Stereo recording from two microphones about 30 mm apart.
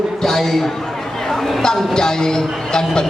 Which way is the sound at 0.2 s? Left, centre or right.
Centre.